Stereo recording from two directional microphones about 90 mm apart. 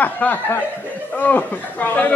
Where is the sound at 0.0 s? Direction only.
20° left (ahead or behind).